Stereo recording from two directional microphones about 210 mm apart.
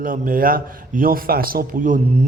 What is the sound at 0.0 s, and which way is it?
A man's voice, 40° right (ahead or behind).